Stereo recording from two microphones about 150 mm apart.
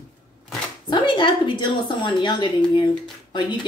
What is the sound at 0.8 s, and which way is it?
A woman's voice, 30° left (ahead or behind).